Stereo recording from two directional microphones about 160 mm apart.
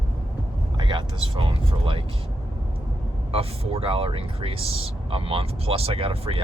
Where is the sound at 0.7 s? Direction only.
30° right (ahead or behind).